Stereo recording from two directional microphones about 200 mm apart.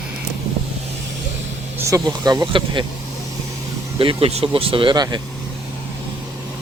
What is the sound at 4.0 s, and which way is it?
Speech, 30° right (ahead or behind).